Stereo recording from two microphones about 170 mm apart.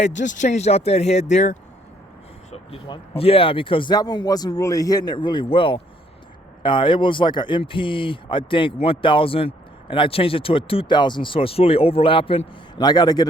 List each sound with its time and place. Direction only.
0.0 s speech: 45° left (ahead or behind)
2.5 s speech: 30° left (ahead or behind)